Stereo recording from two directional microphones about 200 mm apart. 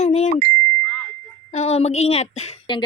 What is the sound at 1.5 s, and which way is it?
Speech, 35° left (ahead or behind).